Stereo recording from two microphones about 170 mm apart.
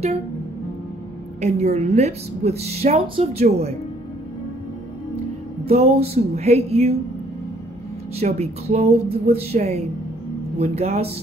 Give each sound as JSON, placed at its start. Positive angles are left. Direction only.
{"t": 1.4, "sound": "a woman's voice", "side_deg": -40}
{"t": 5.7, "sound": "a woman's voice", "side_deg": -35}
{"t": 8.2, "sound": "a woman's voice", "side_deg": -40}